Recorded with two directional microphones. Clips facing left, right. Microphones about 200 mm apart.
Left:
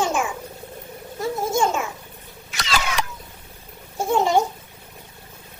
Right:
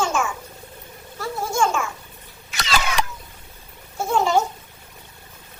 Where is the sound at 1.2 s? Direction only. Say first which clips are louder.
Left 1 dB; 20° left (ahead or behind).